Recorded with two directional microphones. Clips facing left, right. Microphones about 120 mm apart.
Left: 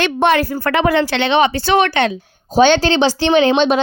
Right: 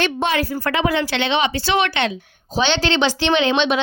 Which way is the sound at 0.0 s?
60° left (ahead or behind).